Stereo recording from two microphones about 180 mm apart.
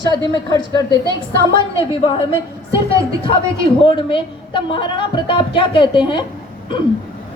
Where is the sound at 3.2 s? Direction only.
30° left (ahead or behind).